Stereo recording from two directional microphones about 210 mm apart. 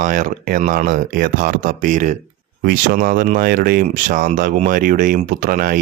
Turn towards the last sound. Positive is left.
turn(degrees=-40)  # may be behind; listen again after turning